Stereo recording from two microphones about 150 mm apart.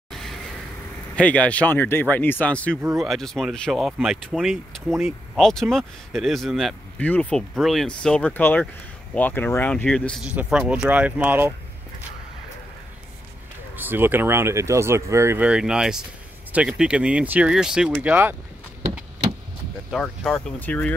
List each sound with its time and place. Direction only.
0.1 s vehicle: centre (ahead or behind)
1.1 s speech: 10° left (ahead or behind)
10.2 s speech: 10° right (ahead or behind)
13.7 s speech: 15° right (ahead or behind)
19.9 s speech: 5° left (ahead or behind)